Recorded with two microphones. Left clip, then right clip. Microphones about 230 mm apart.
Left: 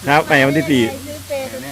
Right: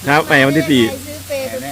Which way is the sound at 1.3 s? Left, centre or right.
Right.